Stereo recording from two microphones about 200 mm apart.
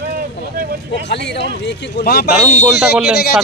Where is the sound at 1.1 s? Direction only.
60° left (ahead or behind).